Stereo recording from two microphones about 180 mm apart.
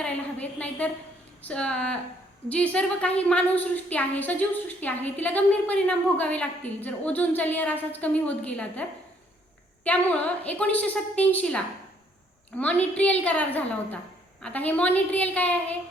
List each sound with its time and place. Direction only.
0.0 s a woman's voice: 5° left (ahead or behind)